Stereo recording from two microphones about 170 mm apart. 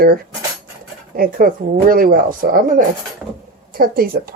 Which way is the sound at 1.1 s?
55° right (ahead or behind).